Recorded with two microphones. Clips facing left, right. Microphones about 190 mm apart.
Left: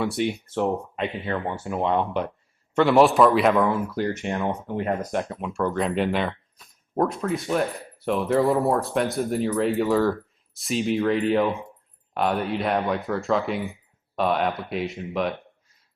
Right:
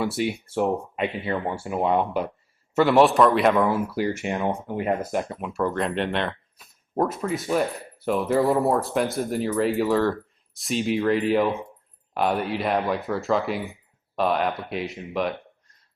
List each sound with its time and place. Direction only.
0.0 s speech: centre (ahead or behind)